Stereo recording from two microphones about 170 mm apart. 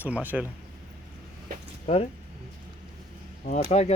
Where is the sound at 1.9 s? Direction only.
40° left (ahead or behind).